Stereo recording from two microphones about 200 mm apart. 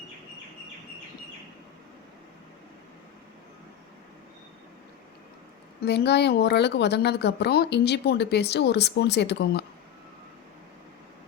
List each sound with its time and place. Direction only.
5.8 s a woman's voice: 55° left (ahead or behind)